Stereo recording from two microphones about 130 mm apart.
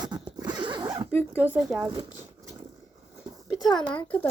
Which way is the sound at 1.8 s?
30° right (ahead or behind).